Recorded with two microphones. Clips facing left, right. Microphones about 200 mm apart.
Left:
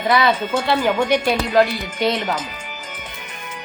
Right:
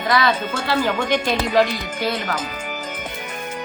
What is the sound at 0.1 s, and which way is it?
Speech, 15° left (ahead or behind).